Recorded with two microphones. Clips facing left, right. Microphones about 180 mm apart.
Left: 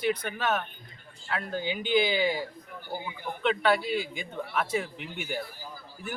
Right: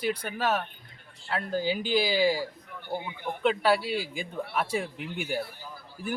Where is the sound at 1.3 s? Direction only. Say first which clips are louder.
Right 3 dB; 35° right (ahead or behind).